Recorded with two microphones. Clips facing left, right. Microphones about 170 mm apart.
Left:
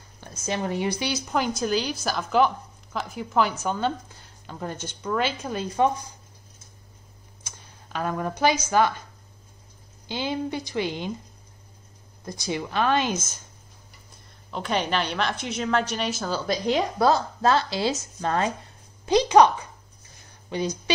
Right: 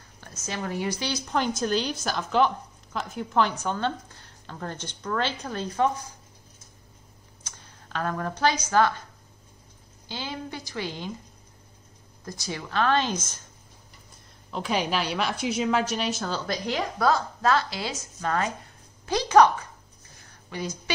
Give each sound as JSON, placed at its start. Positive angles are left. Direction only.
{"t": 0.2, "sound": "a woman's voice", "side_deg": 20}
{"t": 7.4, "sound": "a sound", "side_deg": 10}
{"t": 8.6, "sound": "a woman's voice", "side_deg": 15}
{"t": 10.0, "sound": "speech", "side_deg": 20}
{"t": 12.3, "sound": "a woman's voice", "side_deg": 15}
{"t": 14.5, "sound": "a woman's voice", "side_deg": -5}
{"t": 16.4, "sound": "speech", "side_deg": 20}
{"t": 19.0, "sound": "a woman's voice", "side_deg": 15}